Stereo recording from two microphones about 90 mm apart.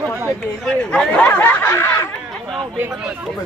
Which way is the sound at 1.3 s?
20° left (ahead or behind).